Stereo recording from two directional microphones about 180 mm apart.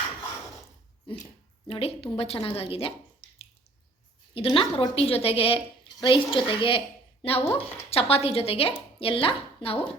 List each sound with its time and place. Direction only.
1.2 s a woman's voice: 30° left (ahead or behind)
4.4 s a woman's voice: 30° left (ahead or behind)